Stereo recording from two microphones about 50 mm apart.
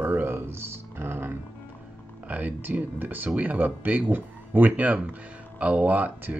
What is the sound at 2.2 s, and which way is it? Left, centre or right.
Speech, right.